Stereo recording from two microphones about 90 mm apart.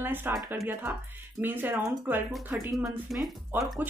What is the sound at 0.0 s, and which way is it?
Speech, 20° right (ahead or behind).